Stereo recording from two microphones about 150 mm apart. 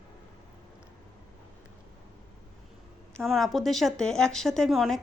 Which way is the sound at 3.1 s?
Centre (ahead or behind).